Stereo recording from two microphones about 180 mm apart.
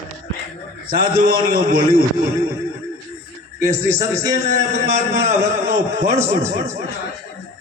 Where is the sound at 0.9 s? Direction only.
55° right (ahead or behind).